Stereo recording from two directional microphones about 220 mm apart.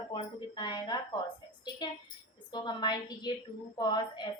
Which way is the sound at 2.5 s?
20° left (ahead or behind).